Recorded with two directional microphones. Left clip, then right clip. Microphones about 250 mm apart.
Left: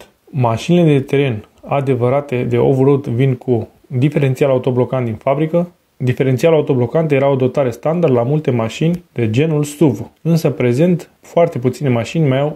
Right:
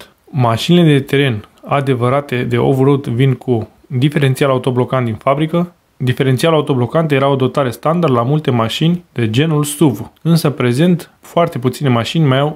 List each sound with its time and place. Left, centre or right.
0.4 s speech: centre